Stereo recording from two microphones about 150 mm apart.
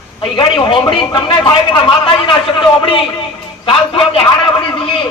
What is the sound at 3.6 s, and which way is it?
Speech, 35° left (ahead or behind).